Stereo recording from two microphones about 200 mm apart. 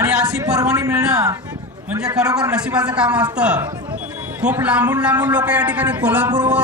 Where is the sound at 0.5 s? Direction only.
15° right (ahead or behind).